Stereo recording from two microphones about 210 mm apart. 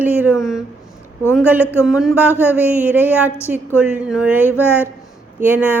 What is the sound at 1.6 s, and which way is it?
Speech, 10° left (ahead or behind).